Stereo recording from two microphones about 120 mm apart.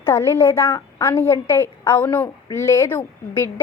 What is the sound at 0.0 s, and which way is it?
A woman's voice, 25° left (ahead or behind).